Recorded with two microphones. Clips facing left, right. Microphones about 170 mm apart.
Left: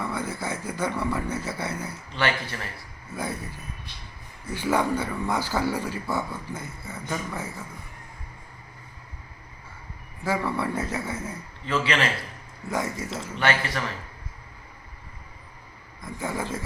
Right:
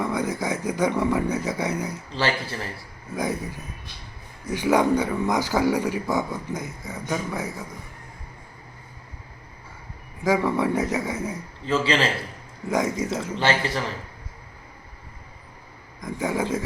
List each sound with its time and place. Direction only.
0.0 s speech: 15° right (ahead or behind)
2.1 s a man's voice: 30° right (ahead or behind)
3.2 s speech: 15° right (ahead or behind)
10.2 s speech: 15° right (ahead or behind)
11.6 s a man's voice: 30° right (ahead or behind)
12.7 s a man's voice: 20° right (ahead or behind)
16.0 s speech: 15° right (ahead or behind)